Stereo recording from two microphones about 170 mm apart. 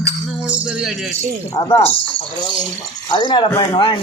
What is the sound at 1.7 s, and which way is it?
Speech, 35° left (ahead or behind).